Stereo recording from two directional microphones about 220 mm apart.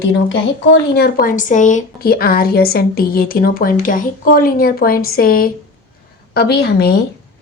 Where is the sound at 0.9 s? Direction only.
40° left (ahead or behind).